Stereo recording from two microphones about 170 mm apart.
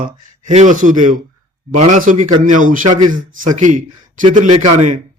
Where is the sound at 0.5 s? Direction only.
50° right (ahead or behind).